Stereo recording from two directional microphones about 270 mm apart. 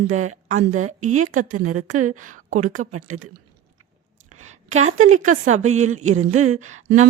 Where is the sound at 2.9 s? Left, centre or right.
Right.